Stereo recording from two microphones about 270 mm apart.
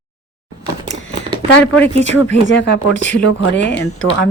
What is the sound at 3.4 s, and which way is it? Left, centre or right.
Speech, left.